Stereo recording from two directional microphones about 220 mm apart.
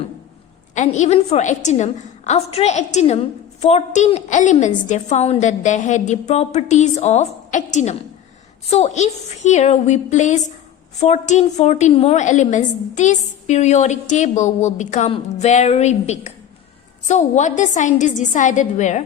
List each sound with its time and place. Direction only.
0.7 s a woman's voice: 35° left (ahead or behind)